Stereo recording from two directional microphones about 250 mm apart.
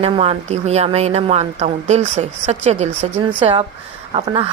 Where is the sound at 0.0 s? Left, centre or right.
Right.